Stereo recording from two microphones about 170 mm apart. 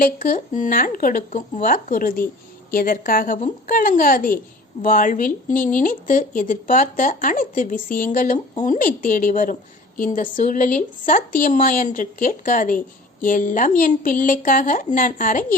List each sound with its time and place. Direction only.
0.0 s a woman's voice: 50° left (ahead or behind)